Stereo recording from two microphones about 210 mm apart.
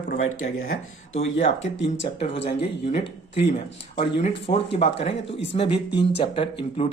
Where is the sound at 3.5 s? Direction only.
30° left (ahead or behind).